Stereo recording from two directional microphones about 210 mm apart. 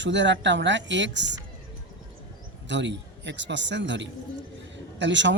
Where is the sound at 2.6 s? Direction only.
60° right (ahead or behind).